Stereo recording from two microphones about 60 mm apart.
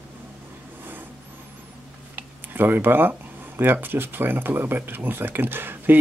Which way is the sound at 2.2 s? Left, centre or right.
Right.